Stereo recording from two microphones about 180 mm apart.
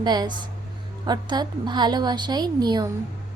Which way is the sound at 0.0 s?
25° right (ahead or behind).